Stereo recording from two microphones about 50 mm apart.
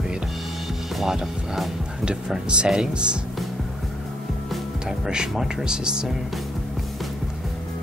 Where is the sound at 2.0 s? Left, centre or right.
Centre.